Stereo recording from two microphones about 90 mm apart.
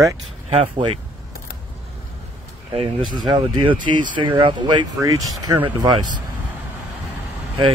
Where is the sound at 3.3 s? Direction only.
65° right (ahead or behind).